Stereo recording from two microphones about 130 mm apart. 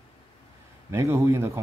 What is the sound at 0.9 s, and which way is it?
Speech, 20° right (ahead or behind).